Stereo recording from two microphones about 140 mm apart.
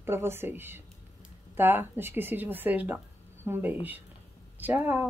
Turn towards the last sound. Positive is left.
turn(degrees=-15)  # may be behind; listen again after turning